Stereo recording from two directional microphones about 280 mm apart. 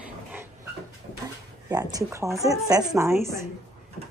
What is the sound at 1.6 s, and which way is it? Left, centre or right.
Speech, centre.